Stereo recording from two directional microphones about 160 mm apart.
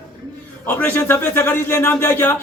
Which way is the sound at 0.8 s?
15° left (ahead or behind).